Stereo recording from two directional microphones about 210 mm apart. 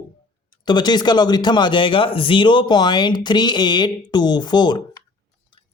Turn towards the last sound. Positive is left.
turn(degrees=25)  # may be behind; listen again after turning